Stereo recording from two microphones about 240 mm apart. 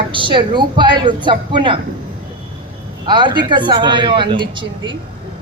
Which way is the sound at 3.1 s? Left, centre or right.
Centre.